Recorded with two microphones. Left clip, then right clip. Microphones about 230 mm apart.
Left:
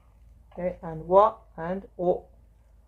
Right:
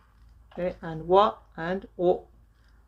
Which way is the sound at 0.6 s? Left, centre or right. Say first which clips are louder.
Even; right.